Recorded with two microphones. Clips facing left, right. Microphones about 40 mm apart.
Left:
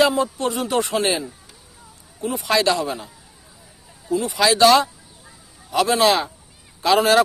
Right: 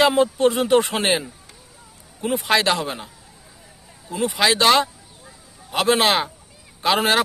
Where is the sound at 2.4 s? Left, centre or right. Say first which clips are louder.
Left 1 dB; right.